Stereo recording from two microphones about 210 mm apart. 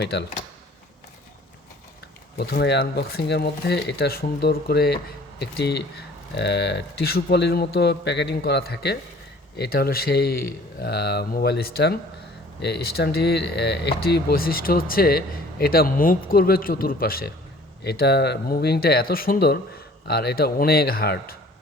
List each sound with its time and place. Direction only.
0.0 s speech: 50° left (ahead or behind)
2.4 s speech: 50° left (ahead or behind)